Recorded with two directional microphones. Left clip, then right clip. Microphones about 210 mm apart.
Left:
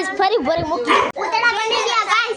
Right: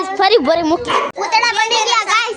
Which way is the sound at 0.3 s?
25° right (ahead or behind).